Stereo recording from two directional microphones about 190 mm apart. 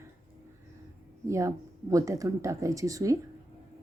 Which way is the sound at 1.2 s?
15° right (ahead or behind).